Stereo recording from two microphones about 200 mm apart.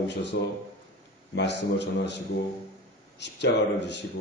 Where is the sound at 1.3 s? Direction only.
60° left (ahead or behind).